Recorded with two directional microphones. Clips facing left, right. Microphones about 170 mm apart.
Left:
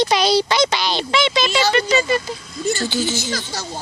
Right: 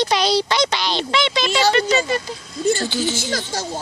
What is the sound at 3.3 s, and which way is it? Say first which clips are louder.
Speech: right 3 dB; 50° right (ahead or behind).